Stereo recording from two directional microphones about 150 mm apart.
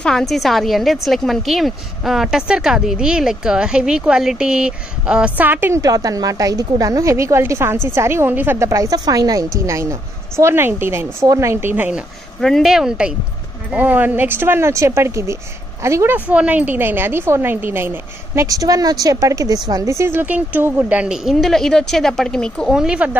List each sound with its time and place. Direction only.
0.0 s speech: centre (ahead or behind); by 5.8 s 15° right (ahead or behind)
5.8 s a woman's voice: 25° right (ahead or behind)
12.4 s a woman's voice: centre (ahead or behind)